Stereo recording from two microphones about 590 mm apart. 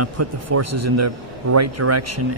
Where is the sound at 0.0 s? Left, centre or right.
Right.